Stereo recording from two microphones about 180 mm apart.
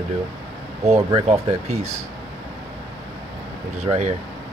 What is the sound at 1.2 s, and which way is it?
Speech, 40° right (ahead or behind).